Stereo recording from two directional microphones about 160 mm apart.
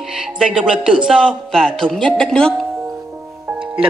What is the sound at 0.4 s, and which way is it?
A man's voice, 5° right (ahead or behind).